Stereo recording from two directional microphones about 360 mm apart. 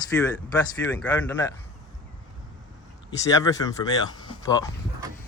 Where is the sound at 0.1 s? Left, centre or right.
Centre.